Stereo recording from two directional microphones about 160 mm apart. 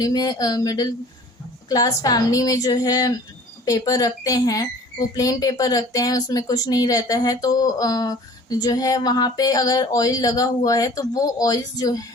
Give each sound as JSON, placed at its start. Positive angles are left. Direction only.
{"t": 0.0, "sound": "a woman's voice", "side_deg": 25}